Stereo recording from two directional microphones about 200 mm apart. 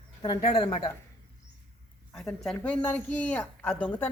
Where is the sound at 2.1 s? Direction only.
Centre (ahead or behind).